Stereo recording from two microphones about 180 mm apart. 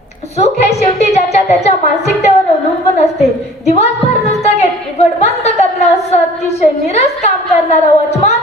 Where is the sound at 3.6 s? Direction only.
35° left (ahead or behind).